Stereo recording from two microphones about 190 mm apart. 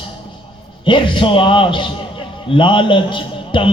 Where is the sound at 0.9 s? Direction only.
25° left (ahead or behind).